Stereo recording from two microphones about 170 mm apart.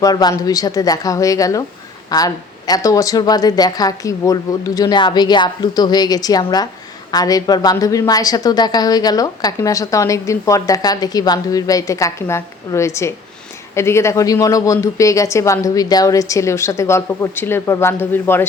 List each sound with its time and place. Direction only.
0.0 s a woman's voice: 25° left (ahead or behind)